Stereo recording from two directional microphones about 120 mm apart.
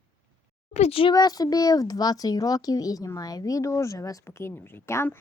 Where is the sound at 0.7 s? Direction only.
60° left (ahead or behind).